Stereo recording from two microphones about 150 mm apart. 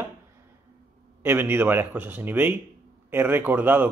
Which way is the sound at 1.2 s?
15° right (ahead or behind).